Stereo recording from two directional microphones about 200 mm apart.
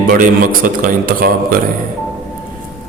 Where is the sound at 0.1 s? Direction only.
45° right (ahead or behind).